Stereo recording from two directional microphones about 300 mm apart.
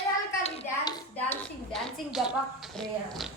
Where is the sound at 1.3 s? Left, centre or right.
Centre.